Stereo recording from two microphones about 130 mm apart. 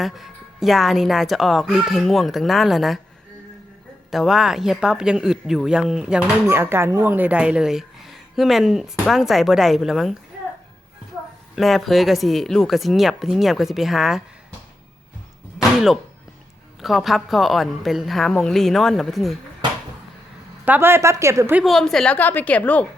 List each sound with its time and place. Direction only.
0.0 s speech: centre (ahead or behind)
4.1 s speech: centre (ahead or behind)
6.5 s speech: 15° right (ahead or behind); by 10.2 s centre (ahead or behind)
11.5 s speech: centre (ahead or behind)
15.5 s music: 5° right (ahead or behind)
16.8 s speech: centre (ahead or behind)
20.7 s speech: 15° right (ahead or behind)
21.6 s a woman's voice: centre (ahead or behind)